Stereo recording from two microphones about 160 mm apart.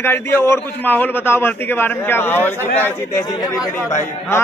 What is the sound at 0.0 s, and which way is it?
A man's voice, 15° left (ahead or behind).